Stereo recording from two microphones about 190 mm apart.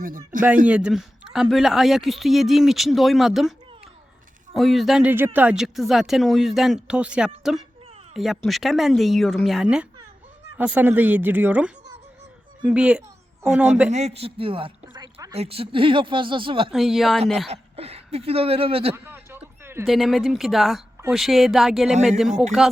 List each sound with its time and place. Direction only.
0.7 s speech: 5° right (ahead or behind)
4.5 s a man's voice: centre (ahead or behind)
13.9 s speech: 35° right (ahead or behind)
15.4 s speech: 30° right (ahead or behind)
16.7 s speech: centre (ahead or behind)
17.5 s speech: 30° right (ahead or behind)
18.9 s a sound: 10° right (ahead or behind)
19.9 s speech: centre (ahead or behind)